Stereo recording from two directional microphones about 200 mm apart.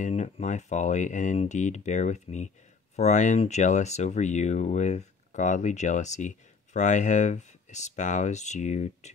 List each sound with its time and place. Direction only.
0.0 s speech: 35° left (ahead or behind)